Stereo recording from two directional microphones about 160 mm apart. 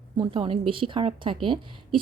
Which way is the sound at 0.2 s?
30° right (ahead or behind).